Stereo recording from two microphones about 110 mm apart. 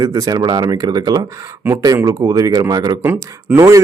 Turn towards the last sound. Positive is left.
turn(degrees=-20)  # may be behind; listen again after turning